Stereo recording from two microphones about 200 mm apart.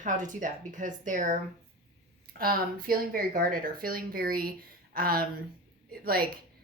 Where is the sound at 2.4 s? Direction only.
45° right (ahead or behind).